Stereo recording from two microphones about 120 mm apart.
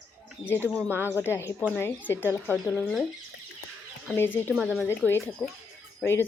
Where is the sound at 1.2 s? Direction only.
20° left (ahead or behind).